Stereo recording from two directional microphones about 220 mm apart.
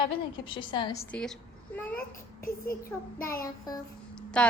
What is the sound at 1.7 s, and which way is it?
Babbling, 5° left (ahead or behind).